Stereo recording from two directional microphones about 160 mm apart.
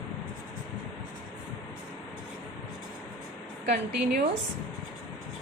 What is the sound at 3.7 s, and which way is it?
Speech, 90° right.